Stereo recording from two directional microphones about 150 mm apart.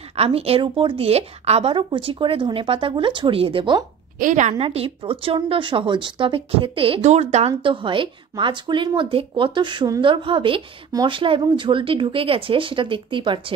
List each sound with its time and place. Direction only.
0.1 s speech: 40° right (ahead or behind)
4.2 s a woman's voice: 55° right (ahead or behind)
4.6 s speech: 40° right (ahead or behind)